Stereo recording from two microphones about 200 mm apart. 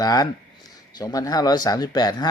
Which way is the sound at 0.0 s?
20° left (ahead or behind).